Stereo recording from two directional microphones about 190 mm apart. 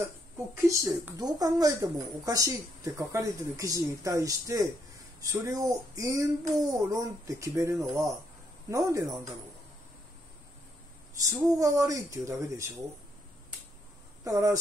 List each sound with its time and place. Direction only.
0.6 s speech: 15° right (ahead or behind)
11.1 s speech: 15° right (ahead or behind)
14.2 s speech: 15° right (ahead or behind)